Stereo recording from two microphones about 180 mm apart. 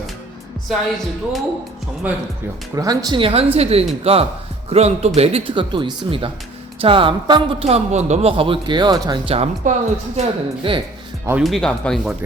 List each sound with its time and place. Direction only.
0.7 s speech: centre (ahead or behind)
2.7 s a man's voice: 20° right (ahead or behind)
11.3 s speech: 5° right (ahead or behind)